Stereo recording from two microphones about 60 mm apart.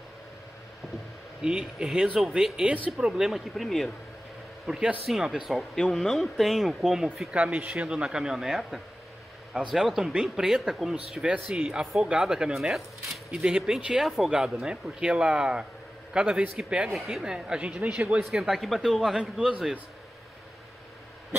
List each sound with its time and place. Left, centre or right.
1.4 s speech: centre
3.3 s speech: centre
4.6 s speech: centre
14.0 s speech: centre
14.3 s speech: centre
16.9 s speech: centre
17.2 s speech: centre
18.3 s speech: centre